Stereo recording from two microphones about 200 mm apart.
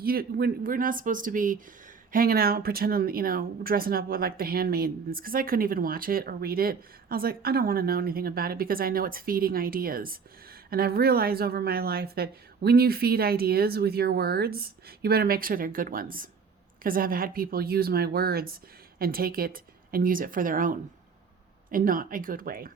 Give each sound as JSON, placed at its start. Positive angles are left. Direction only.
{"t": 0.0, "sound": "speech", "side_deg": -50}